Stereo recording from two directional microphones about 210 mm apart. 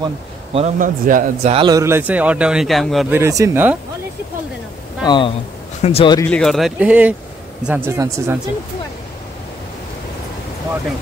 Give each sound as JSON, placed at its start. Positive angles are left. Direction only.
{"t": 0.0, "sound": "a man's voice", "side_deg": -30}
{"t": 1.5, "sound": "speech", "side_deg": -20}
{"t": 3.2, "sound": "speech", "side_deg": -15}
{"t": 5.0, "sound": "speech", "side_deg": 20}
{"t": 6.2, "sound": "speech", "side_deg": 5}